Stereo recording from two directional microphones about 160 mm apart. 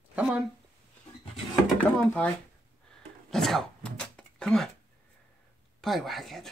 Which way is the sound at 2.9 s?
Centre (ahead or behind).